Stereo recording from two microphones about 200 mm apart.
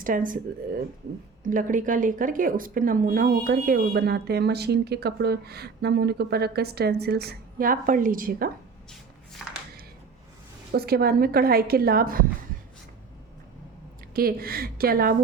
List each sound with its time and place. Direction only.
0.0 s speech: 45° right (ahead or behind)
1.5 s speech: 40° right (ahead or behind)
10.7 s speech: 50° right (ahead or behind)
14.1 s speech: 50° right (ahead or behind)